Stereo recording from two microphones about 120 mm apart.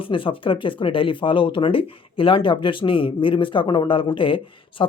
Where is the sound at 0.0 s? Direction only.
45° left (ahead or behind).